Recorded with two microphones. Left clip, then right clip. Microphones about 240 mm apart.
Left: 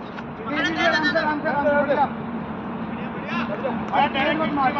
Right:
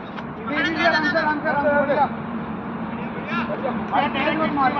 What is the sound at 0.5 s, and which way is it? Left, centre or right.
Vehicle, centre.